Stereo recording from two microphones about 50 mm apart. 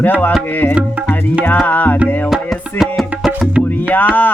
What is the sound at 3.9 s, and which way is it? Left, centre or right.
Music, left.